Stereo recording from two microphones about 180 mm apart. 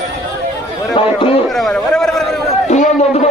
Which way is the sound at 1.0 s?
30° left (ahead or behind).